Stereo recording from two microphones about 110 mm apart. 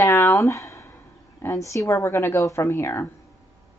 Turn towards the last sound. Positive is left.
turn(degrees=25)  # may be behind; listen again after turning